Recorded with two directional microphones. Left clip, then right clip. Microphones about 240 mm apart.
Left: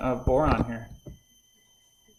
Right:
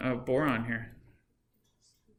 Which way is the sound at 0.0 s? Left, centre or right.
Centre.